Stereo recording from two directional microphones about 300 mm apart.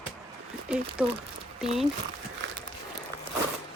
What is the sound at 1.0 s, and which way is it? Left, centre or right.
Speech, centre.